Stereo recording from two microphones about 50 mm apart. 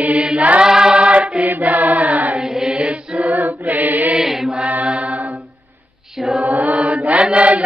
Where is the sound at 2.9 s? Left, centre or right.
Right.